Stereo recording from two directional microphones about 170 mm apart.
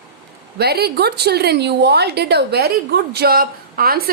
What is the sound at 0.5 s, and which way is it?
A woman's voice, 70° right (ahead or behind).